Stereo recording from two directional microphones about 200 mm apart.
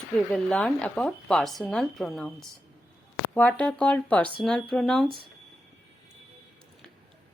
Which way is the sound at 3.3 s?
5° left (ahead or behind).